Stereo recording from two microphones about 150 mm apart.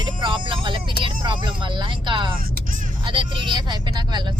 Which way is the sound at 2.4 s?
70° right (ahead or behind).